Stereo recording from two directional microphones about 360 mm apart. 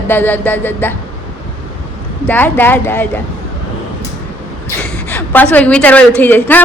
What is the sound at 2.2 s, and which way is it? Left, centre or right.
Speech, centre.